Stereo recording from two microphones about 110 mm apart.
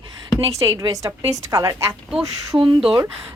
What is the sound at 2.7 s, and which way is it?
Speech, 5° right (ahead or behind).